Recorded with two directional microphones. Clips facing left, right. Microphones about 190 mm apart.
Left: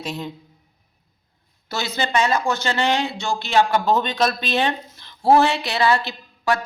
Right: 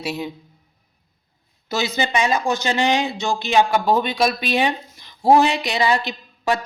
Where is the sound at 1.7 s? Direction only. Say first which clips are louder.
Right 1 dB; 15° right (ahead or behind).